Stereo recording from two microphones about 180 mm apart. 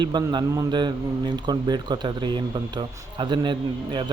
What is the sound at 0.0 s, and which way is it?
Speech, 25° right (ahead or behind).